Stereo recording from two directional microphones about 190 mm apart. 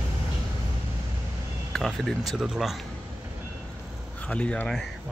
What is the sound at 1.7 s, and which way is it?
Speech, centre (ahead or behind).